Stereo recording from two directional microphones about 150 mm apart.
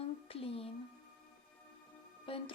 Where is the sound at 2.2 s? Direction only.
35° left (ahead or behind).